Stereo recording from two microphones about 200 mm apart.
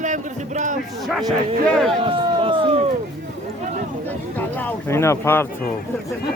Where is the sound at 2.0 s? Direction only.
25° right (ahead or behind).